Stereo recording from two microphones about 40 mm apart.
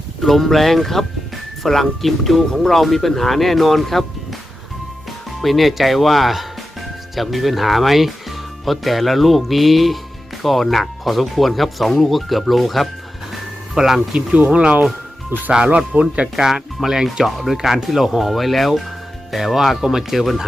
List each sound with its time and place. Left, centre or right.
0.2 s speech: centre
5.4 s speech: centre
14.5 s speech: right
15.3 s speech: right
16.0 s speech: right
16.4 s speech: centre